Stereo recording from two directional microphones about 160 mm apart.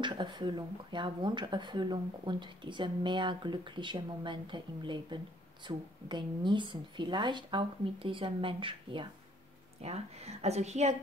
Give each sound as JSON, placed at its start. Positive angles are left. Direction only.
{"t": 0.0, "sound": "a woman's voice", "side_deg": -30}